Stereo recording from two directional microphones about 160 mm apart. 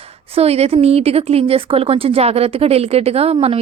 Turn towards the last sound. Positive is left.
turn(degrees=-40)  # may be behind; listen again after turning